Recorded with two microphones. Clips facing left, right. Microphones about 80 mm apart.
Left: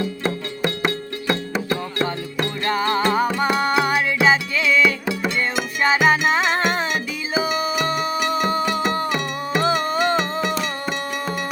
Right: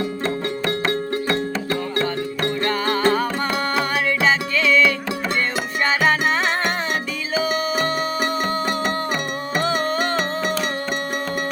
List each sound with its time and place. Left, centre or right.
1.3 s music: left
9.6 s music: centre